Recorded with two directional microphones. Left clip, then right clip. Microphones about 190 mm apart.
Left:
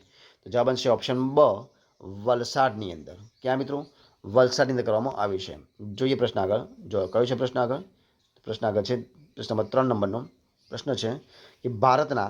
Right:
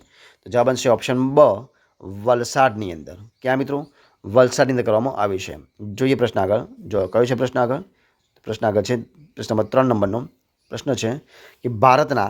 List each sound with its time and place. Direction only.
0.1 s speech: 30° right (ahead or behind)